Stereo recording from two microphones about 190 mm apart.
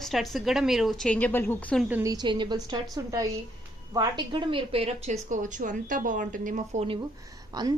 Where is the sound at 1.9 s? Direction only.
15° right (ahead or behind); by 5.1 s 30° right (ahead or behind).